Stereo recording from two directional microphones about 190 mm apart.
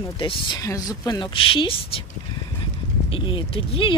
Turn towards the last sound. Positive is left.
turn(degrees=25)  # may be behind; listen again after turning